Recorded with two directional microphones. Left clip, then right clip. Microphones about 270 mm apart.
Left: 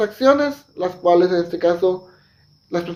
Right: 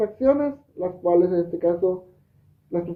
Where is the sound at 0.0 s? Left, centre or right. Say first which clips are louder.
Left 5 dB; centre.